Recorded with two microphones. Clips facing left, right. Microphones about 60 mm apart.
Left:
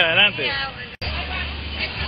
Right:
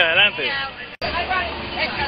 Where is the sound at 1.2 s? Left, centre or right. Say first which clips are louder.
Right 9 dB; right.